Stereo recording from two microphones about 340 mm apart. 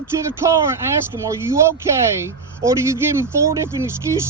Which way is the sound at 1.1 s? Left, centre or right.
Centre.